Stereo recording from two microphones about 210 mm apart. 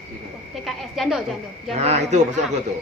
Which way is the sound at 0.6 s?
Centre (ahead or behind).